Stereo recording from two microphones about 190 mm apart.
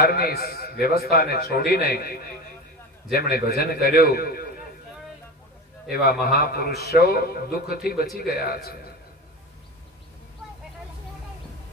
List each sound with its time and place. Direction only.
0.0 s a man's voice: 55° left (ahead or behind)
5.9 s a man's voice: 55° left (ahead or behind)